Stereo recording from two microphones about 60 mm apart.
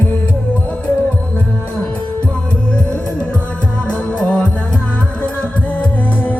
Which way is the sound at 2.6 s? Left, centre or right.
Left.